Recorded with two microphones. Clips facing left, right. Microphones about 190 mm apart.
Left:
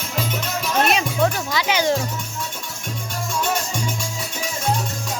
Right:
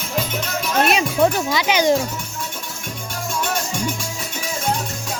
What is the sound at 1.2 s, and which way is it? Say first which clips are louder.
Speech: right 3 dB; 20° right (ahead or behind).